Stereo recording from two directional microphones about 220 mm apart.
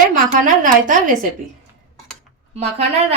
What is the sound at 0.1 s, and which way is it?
Speech, 35° right (ahead or behind).